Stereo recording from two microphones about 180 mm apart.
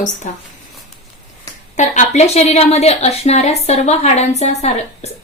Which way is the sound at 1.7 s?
45° left (ahead or behind).